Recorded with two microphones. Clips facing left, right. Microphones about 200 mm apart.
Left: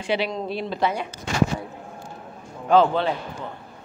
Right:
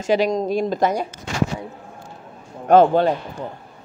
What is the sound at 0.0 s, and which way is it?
Speech, 45° right (ahead or behind).